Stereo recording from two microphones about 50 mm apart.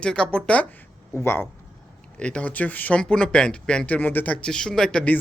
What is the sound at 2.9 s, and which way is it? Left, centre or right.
Speech, centre.